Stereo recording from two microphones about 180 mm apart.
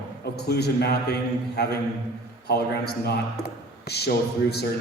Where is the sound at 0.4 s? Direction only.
65° left (ahead or behind).